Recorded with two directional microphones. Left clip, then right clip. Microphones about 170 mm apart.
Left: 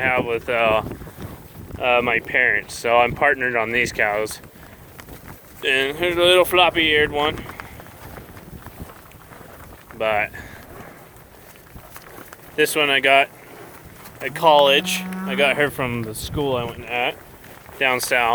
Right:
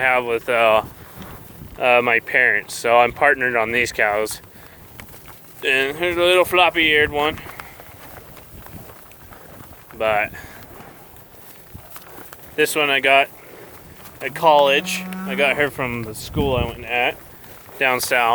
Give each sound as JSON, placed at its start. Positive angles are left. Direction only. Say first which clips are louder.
{"t": 0.0, "sound": "speech", "louder": "right 2 dB", "side_deg": -35}
{"t": 1.8, "sound": "speech", "louder": "right 3 dB", "side_deg": -40}
{"t": 5.6, "sound": "speech", "louder": "right 1 dB", "side_deg": -15}
{"t": 10.0, "sound": "speech", "louder": "right 2 dB", "side_deg": -25}
{"t": 12.5, "sound": "speech", "louder": "even", "side_deg": -10}